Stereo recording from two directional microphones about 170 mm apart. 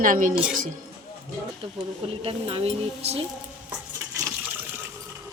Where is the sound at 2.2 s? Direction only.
35° right (ahead or behind).